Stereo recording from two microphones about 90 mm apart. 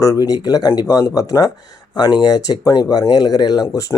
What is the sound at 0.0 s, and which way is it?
Speech, 40° left (ahead or behind).